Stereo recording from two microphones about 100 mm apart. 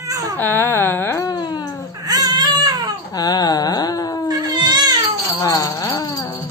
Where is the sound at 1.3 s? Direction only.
45° left (ahead or behind).